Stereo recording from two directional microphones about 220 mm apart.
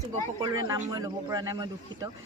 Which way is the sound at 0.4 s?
15° right (ahead or behind).